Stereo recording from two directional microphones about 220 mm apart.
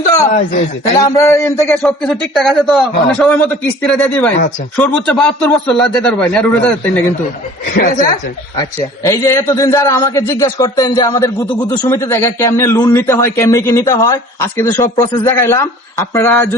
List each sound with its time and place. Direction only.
0.3 s speech: 35° left (ahead or behind)
1.0 s a man's voice: 15° left (ahead or behind)
7.8 s speech: 40° left (ahead or behind)
8.5 s a man's voice: 15° left (ahead or behind)